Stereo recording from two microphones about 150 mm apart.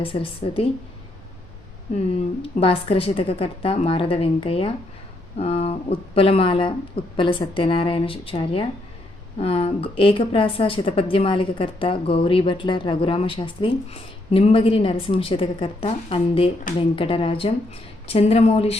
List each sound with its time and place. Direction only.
0.0 s a woman's voice: 35° left (ahead or behind)
2.4 s a woman's voice: 40° left (ahead or behind)